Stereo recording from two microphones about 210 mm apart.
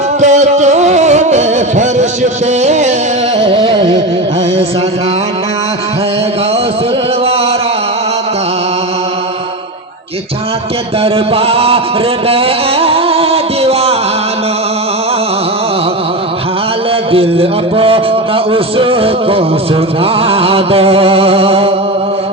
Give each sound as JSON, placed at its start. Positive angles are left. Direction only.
{"t": 0.2, "sound": "music", "side_deg": -35}
{"t": 11.0, "sound": "chant", "side_deg": -25}
{"t": 12.3, "sound": "music", "side_deg": -25}
{"t": 17.1, "sound": "music", "side_deg": -25}
{"t": 20.0, "sound": "a sound", "side_deg": -25}